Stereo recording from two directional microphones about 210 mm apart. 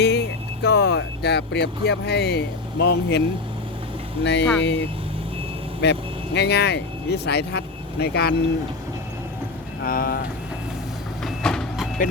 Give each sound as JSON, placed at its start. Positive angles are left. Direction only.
{"t": 0.0, "sound": "speech", "side_deg": 50}
{"t": 9.8, "sound": "speech", "side_deg": 45}
{"t": 11.2, "sound": "vehicle", "side_deg": 0}